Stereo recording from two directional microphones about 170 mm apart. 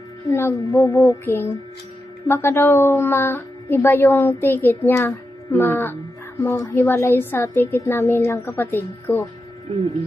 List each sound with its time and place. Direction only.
0.3 s a woman's voice: 15° left (ahead or behind)